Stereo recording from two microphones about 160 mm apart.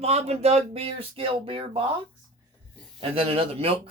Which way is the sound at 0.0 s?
40° right (ahead or behind).